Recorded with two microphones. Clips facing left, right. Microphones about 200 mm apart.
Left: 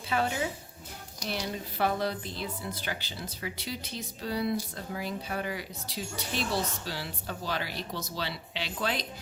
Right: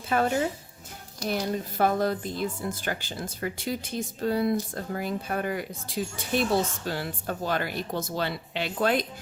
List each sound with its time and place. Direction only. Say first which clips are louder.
0.1 s speech: right 5 dB; 50° right (ahead or behind)